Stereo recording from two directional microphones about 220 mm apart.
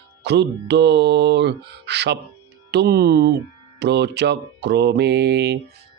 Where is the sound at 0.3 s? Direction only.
50° right (ahead or behind).